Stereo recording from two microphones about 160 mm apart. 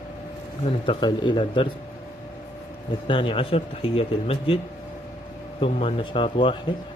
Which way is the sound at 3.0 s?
30° left (ahead or behind).